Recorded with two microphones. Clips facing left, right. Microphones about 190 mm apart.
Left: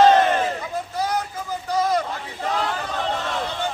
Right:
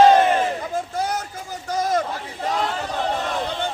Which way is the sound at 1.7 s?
45° right (ahead or behind).